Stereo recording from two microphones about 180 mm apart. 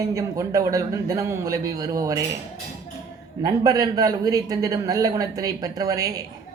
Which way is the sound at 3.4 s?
20° right (ahead or behind).